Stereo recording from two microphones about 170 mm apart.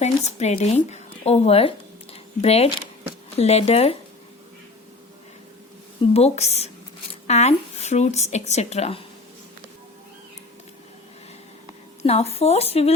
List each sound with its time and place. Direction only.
0.0 s speech: 40° left (ahead or behind)
6.0 s speech: 35° left (ahead or behind)
12.0 s speech: 35° left (ahead or behind)